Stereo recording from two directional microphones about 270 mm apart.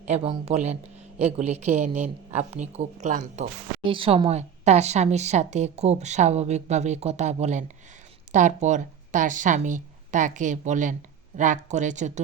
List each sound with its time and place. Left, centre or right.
0.0 s a woman's voice: right